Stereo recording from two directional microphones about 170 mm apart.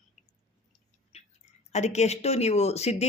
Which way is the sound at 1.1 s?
40° left (ahead or behind).